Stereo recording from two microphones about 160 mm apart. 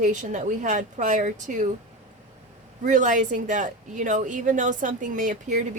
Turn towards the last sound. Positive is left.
turn(degrees=-50)  # may be behind; listen again after turning